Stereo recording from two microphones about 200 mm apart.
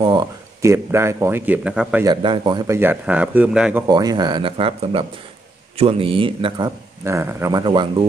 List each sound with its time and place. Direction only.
0.0 s speech: 20° right (ahead or behind); by 2.0 s 5° right (ahead or behind)
2.0 s speech: 25° right (ahead or behind); by 3.8 s 5° right (ahead or behind)
3.8 s speech: 20° right (ahead or behind)
7.1 s speech: 15° right (ahead or behind)